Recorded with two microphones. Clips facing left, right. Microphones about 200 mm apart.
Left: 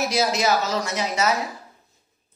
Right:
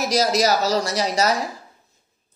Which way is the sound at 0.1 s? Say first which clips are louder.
Right 6 dB; 40° right (ahead or behind).